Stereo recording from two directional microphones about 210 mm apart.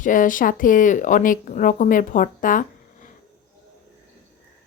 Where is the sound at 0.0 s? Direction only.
40° left (ahead or behind).